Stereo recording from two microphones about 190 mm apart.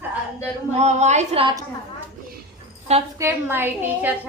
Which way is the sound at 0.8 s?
35° right (ahead or behind).